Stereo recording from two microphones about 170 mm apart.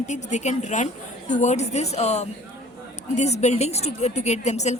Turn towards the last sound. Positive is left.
turn(degrees=40)  # may be behind; listen again after turning